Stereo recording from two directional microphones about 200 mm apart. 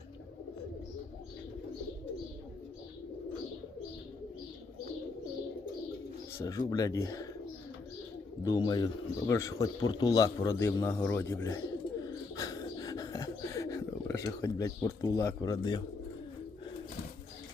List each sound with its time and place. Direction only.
6.4 s speech: 20° left (ahead or behind)
8.4 s speech: 20° left (ahead or behind)
12.0 s beatboxing: 20° left (ahead or behind)